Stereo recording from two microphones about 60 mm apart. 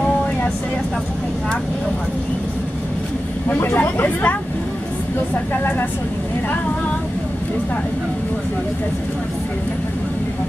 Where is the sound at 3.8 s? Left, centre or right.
Left.